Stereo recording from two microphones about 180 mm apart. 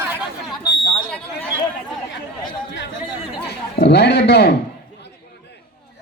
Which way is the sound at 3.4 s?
65° left (ahead or behind).